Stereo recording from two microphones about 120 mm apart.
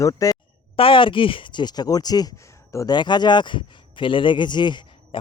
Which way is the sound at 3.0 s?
40° left (ahead or behind).